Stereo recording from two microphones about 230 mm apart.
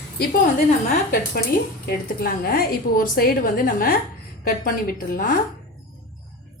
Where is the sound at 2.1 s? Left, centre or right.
Left.